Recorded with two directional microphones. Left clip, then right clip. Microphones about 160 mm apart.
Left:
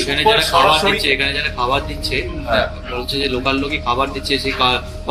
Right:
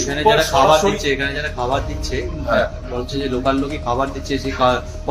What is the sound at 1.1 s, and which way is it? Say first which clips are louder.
Speech: left 3 dB; 70° right (ahead or behind).